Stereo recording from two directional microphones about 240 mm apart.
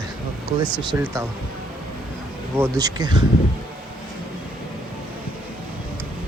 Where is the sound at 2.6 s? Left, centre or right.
Centre.